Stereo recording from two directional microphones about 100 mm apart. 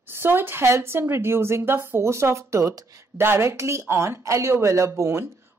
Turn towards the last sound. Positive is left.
turn(degrees=-25)  # may be behind; listen again after turning